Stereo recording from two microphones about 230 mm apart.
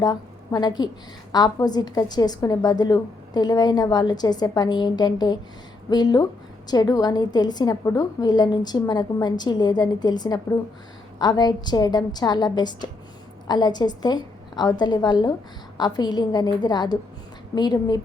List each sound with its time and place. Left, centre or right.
0.0 s a woman's voice: centre